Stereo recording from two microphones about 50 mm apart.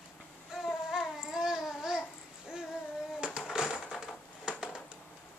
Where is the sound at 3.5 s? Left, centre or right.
Centre.